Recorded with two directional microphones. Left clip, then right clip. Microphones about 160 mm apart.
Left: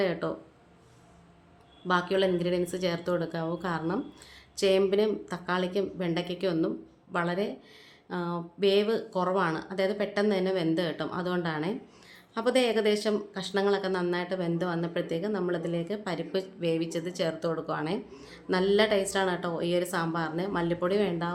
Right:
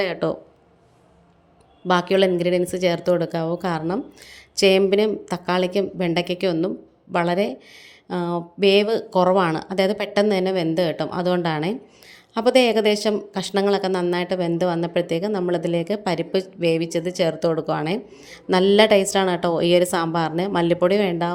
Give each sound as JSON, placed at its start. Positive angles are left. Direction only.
{"t": 0.0, "sound": "a woman's voice", "side_deg": -40}
{"t": 1.9, "sound": "a woman's voice", "side_deg": -35}